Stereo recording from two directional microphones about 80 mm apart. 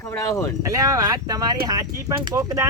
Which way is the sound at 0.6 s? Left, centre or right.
Right.